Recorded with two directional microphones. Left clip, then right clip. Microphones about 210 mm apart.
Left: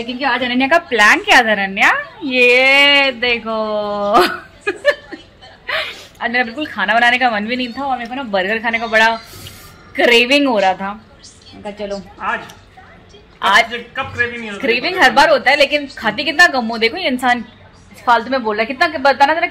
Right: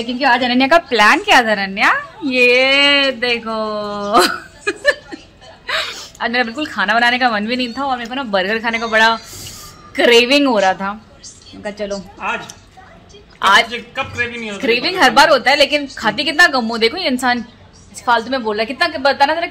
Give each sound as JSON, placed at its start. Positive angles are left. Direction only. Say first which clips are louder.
{"t": 0.0, "sound": "a woman's voice", "louder": "right 3 dB", "side_deg": -30}
{"t": 0.7, "sound": "speech", "louder": "even", "side_deg": -10}
{"t": 5.7, "sound": "a woman's voice", "louder": "even", "side_deg": -10}
{"t": 13.4, "sound": "a woman's voice", "louder": "right 1 dB", "side_deg": -10}
{"t": 13.9, "sound": "a man's voice", "louder": "left 2 dB", "side_deg": -50}
{"t": 14.6, "sound": "a woman's voice", "louder": "even", "side_deg": -15}
{"t": 18.0, "sound": "a woman's voice", "louder": "left 2 dB", "side_deg": 15}